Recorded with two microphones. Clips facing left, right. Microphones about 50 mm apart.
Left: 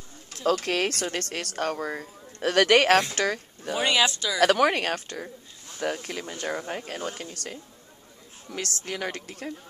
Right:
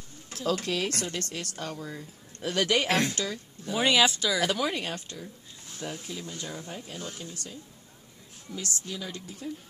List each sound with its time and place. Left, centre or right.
0.5 s a woman's voice: left
3.7 s speech: centre
4.4 s a woman's voice: left